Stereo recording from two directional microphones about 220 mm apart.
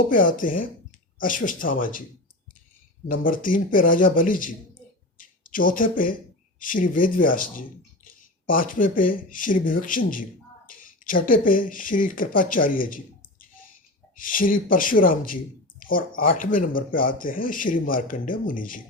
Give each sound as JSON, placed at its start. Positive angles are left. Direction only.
{"t": 0.0, "sound": "speech", "side_deg": 40}
{"t": 3.1, "sound": "speech", "side_deg": 40}